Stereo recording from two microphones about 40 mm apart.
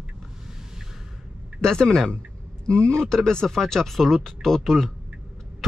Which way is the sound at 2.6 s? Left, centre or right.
Left.